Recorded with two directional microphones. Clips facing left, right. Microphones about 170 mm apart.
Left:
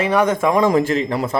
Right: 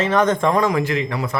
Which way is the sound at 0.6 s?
35° left (ahead or behind).